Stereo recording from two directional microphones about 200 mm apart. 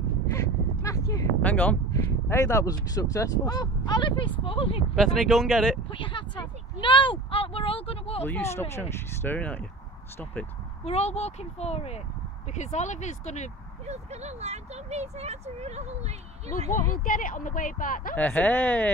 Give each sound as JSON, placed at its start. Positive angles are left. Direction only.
{"t": 0.3, "sound": "speech", "side_deg": 15}
{"t": 4.9, "sound": "speech", "side_deg": 0}
{"t": 5.9, "sound": "speech", "side_deg": 25}
{"t": 8.2, "sound": "speech", "side_deg": 10}
{"t": 10.8, "sound": "speech", "side_deg": 30}
{"t": 13.8, "sound": "speech", "side_deg": -35}
{"t": 16.9, "sound": "speech", "side_deg": 45}
{"t": 18.1, "sound": "speech", "side_deg": 5}